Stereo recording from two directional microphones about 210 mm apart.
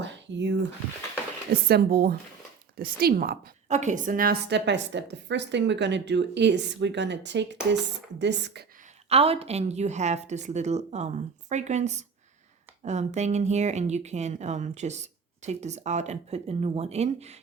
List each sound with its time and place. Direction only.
0.0 s a sound: 60° right (ahead or behind)
1.6 s a woman's voice: 45° right (ahead or behind)
9.0 s a woman's voice: 30° right (ahead or behind)